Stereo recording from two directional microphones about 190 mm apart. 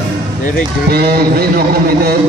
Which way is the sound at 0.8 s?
55° right (ahead or behind).